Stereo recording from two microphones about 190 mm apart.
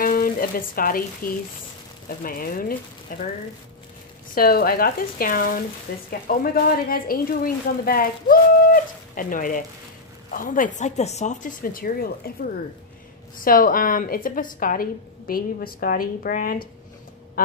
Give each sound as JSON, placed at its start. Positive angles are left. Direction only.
{"t": 0.0, "sound": "a woman's voice", "side_deg": 50}
{"t": 4.4, "sound": "a woman's voice", "side_deg": 50}
{"t": 13.4, "sound": "a woman's voice", "side_deg": 45}